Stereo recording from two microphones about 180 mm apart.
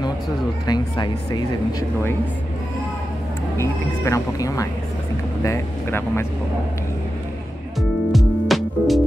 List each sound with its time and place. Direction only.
0.7 s speech: 20° left (ahead or behind)
3.5 s speech: 15° left (ahead or behind)
8.1 s music: centre (ahead or behind)